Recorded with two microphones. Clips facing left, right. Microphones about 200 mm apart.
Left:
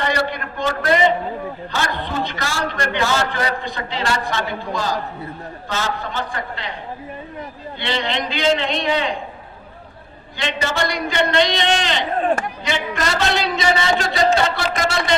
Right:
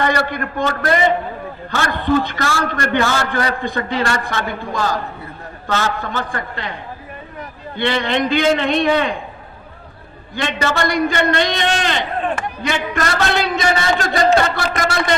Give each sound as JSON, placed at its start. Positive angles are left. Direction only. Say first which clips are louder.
{"t": 0.0, "sound": "a man's voice", "louder": "right 3 dB", "side_deg": -50}
{"t": 7.8, "sound": "a man's voice", "louder": "right 5 dB", "side_deg": -55}
{"t": 10.3, "sound": "a man's voice", "louder": "right 3 dB", "side_deg": -50}